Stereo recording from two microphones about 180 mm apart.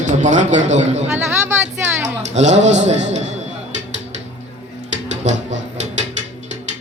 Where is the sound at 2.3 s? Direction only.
40° right (ahead or behind).